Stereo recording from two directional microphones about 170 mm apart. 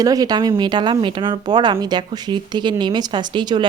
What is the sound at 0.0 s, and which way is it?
Speech, 20° right (ahead or behind).